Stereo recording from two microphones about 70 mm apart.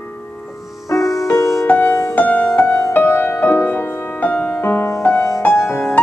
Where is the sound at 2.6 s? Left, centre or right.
Left.